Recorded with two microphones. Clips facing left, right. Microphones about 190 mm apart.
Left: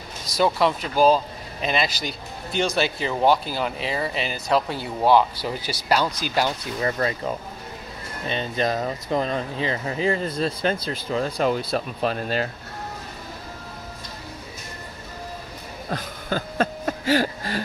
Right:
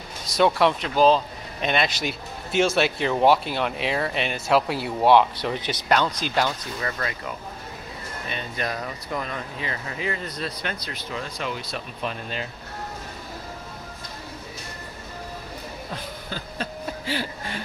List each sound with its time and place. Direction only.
0.3 s speech: centre (ahead or behind)
6.8 s speech: 30° left (ahead or behind)
15.9 s a sound: 50° left (ahead or behind)